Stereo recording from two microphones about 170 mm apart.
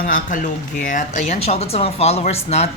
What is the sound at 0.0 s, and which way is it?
Speech, 50° left (ahead or behind).